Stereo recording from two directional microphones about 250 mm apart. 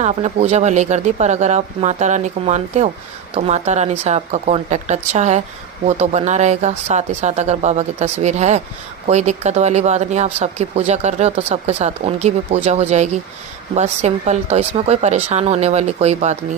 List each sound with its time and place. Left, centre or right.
0.0 s speech: right